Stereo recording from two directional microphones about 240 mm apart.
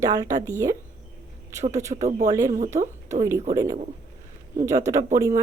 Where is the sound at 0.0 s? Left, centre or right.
Centre.